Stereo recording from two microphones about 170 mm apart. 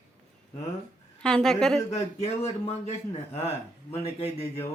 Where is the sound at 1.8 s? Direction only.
40° left (ahead or behind).